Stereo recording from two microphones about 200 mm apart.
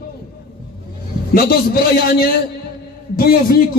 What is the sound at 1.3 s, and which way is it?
Speech, 50° left (ahead or behind).